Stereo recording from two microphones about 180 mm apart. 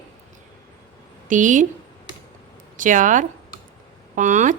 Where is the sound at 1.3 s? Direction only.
45° right (ahead or behind).